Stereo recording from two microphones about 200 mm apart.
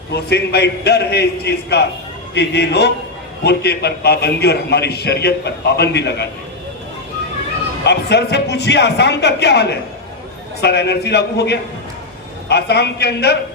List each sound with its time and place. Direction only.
0.1 s a man's voice: 55° left (ahead or behind)
7.9 s a man's voice: 55° left (ahead or behind)